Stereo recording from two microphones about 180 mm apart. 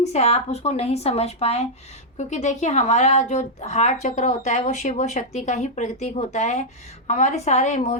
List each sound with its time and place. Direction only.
0.0 s speech: 40° left (ahead or behind)